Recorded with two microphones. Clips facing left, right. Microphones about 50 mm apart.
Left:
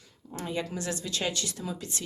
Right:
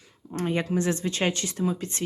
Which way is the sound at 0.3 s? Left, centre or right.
Right.